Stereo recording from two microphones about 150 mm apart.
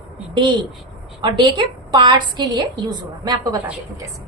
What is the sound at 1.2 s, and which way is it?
A woman's voice, 30° right (ahead or behind).